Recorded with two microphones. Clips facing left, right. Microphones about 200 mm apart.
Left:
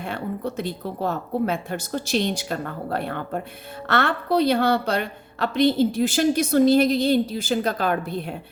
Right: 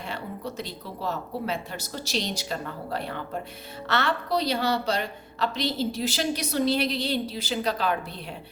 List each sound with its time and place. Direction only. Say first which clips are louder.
0.0 s a woman's voice: left 6 dB; 55° left (ahead or behind)